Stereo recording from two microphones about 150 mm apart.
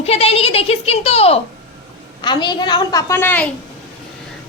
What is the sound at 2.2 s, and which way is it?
A woman's voice, 30° left (ahead or behind).